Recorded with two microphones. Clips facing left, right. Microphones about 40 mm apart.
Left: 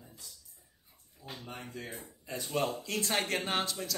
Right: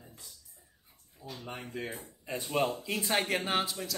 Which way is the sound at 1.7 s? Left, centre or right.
Right.